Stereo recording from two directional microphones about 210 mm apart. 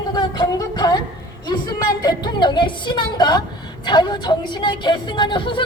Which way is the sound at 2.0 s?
20° left (ahead or behind).